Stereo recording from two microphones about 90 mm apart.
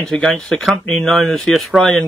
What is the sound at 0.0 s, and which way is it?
Speech, 5° left (ahead or behind).